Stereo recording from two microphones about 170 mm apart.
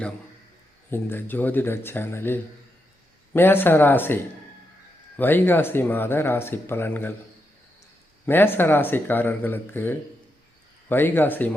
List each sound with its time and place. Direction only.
0.9 s speech: 10° left (ahead or behind)
8.3 s speech: 10° left (ahead or behind)